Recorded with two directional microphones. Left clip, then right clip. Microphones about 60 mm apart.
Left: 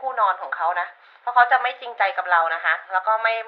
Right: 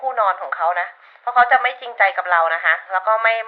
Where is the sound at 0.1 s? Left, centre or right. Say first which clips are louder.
Right 2 dB; right.